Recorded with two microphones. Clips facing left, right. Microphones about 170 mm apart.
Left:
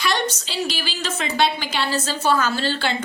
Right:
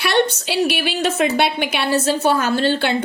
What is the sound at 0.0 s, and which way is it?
A woman's voice, 60° right (ahead or behind).